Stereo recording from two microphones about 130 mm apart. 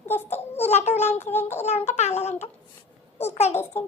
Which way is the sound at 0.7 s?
60° left (ahead or behind).